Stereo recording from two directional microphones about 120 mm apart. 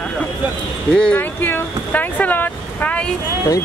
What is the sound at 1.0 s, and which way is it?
Speech, 15° left (ahead or behind).